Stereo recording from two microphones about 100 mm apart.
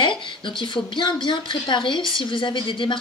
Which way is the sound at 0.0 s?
55° left (ahead or behind).